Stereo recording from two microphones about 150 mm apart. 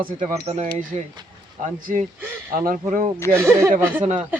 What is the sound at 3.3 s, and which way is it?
Speech, 15° right (ahead or behind).